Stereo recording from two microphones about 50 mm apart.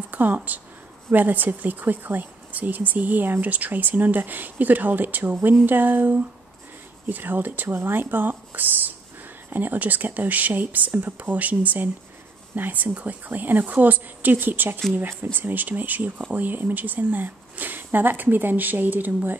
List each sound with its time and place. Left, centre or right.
0.1 s a woman's voice: right
11.3 s a woman's voice: right